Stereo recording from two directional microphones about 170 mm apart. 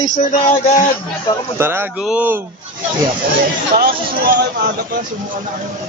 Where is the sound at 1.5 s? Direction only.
15° right (ahead or behind).